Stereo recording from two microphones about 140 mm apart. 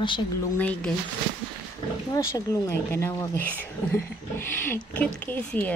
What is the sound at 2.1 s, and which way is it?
Speech, 20° left (ahead or behind).